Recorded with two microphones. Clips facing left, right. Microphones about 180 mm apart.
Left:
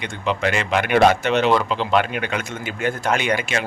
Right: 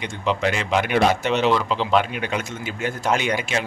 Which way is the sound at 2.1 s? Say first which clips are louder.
Left 1 dB; 60° left (ahead or behind).